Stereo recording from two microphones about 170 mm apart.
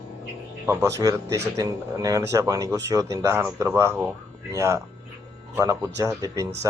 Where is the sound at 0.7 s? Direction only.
15° right (ahead or behind).